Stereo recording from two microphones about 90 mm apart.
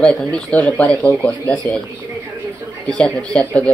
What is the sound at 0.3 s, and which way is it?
Speech, 15° left (ahead or behind).